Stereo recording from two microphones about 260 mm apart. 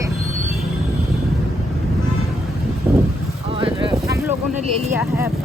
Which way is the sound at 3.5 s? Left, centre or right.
Centre.